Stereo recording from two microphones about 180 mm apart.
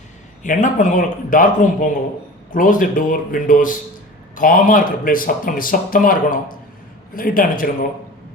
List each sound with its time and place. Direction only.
0.4 s speech: 45° left (ahead or behind)